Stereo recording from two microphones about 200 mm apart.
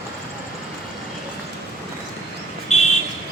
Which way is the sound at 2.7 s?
35° left (ahead or behind).